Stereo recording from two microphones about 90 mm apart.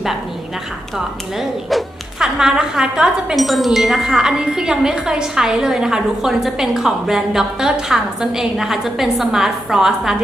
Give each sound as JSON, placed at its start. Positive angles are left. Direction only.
{"t": 0.9, "sound": "speech", "side_deg": -5}